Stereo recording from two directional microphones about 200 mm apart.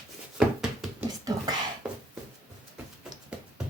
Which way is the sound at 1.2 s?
20° right (ahead or behind).